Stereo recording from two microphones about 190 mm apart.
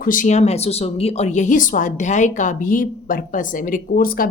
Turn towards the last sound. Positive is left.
turn(degrees=50)  # may be behind; listen again after turning